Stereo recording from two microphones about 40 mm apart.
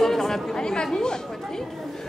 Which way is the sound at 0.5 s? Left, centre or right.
Centre.